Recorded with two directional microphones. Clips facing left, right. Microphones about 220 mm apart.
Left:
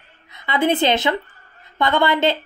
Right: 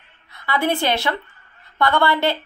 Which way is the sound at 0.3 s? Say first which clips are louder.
Left 2 dB; 20° left (ahead or behind).